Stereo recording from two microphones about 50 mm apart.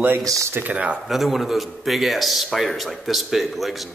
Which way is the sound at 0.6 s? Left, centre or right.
Right.